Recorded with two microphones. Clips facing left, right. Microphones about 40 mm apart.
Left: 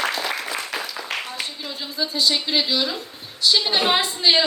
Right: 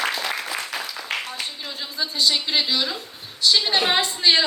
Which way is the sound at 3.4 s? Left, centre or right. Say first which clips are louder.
Even; centre.